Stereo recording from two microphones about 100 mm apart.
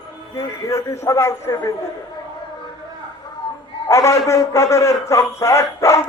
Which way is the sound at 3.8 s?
30° left (ahead or behind).